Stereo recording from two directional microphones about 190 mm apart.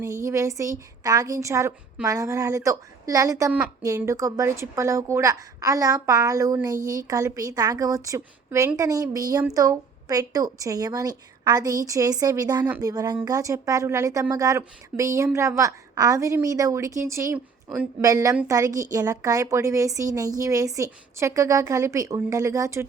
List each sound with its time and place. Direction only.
0.0 s a woman's voice: 15° right (ahead or behind)